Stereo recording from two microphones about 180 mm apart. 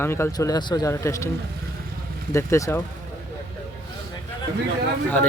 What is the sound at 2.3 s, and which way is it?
Speech, 15° left (ahead or behind).